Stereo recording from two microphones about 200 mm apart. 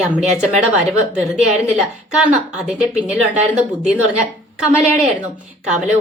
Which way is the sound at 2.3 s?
35° right (ahead or behind).